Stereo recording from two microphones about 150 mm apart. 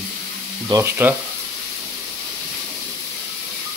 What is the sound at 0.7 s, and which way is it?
Stir, 15° right (ahead or behind).